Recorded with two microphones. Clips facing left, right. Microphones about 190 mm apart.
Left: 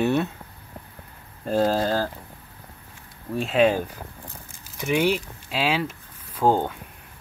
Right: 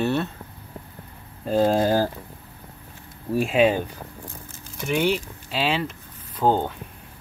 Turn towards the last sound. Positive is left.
turn(degrees=10)  # may be behind; listen again after turning